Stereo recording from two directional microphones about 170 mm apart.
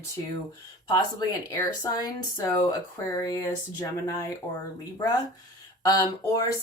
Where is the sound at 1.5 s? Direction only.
20° left (ahead or behind).